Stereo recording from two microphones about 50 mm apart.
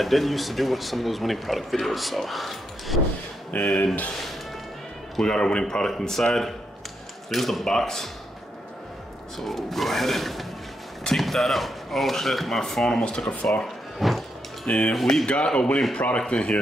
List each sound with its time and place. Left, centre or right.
0.0 s speech: centre
3.5 s speech: left
5.2 s speech: centre
9.4 s speech: centre
13.9 s music: centre
14.7 s speech: left
15.0 s speech: centre
15.2 s speech: left